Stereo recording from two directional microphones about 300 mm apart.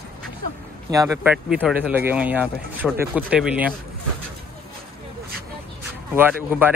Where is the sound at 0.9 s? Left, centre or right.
Centre.